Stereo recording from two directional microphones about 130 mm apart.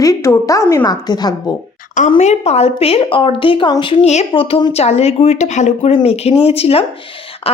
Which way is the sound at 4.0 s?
60° left (ahead or behind).